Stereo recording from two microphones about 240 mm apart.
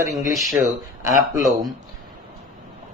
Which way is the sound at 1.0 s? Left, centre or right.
Centre.